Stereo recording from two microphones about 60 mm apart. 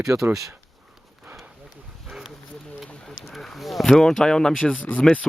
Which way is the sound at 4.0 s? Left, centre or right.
Centre.